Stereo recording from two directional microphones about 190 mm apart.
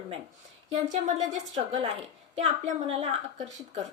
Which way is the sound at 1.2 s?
20° right (ahead or behind).